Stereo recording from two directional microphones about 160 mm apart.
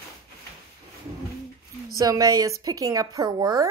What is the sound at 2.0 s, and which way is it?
A woman's voice, 25° right (ahead or behind).